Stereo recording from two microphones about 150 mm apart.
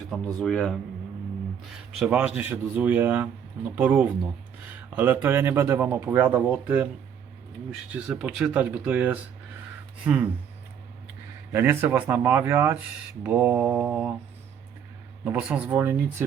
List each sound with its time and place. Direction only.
0.3 s a man's voice: 5° left (ahead or behind)
2.0 s speech: 10° right (ahead or behind)
7.9 s speech: 5° right (ahead or behind)
11.5 s speech: 15° right (ahead or behind)
15.2 s speech: 10° right (ahead or behind)